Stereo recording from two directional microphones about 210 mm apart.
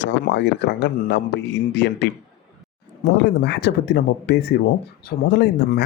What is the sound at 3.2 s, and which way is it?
Speech, 55° left (ahead or behind).